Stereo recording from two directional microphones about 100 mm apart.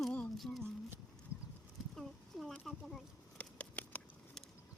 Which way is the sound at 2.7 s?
Centre (ahead or behind).